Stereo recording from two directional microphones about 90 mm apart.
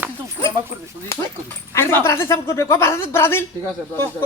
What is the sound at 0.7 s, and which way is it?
Speech, 30° right (ahead or behind).